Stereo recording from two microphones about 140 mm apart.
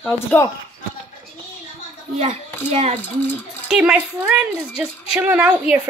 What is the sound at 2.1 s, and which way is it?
Speech, 50° right (ahead or behind).